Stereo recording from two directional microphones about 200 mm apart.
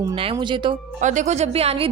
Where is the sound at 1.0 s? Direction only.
40° right (ahead or behind).